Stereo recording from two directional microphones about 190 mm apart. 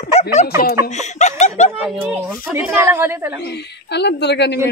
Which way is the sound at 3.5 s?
65° left (ahead or behind).